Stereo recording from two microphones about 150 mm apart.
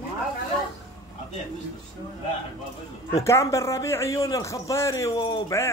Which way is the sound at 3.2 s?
20° left (ahead or behind).